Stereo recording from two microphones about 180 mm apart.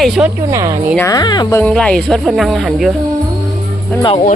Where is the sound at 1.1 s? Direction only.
20° left (ahead or behind).